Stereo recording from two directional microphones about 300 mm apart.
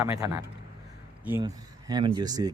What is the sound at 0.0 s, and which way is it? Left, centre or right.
Speech, centre.